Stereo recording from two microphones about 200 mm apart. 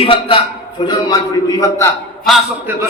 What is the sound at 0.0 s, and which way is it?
A man's voice, 25° left (ahead or behind).